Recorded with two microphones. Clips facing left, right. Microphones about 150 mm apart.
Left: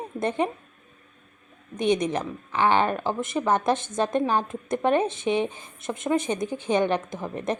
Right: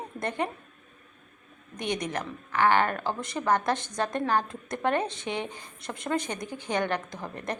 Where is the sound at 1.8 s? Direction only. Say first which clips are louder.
Left 8 dB; 20° left (ahead or behind).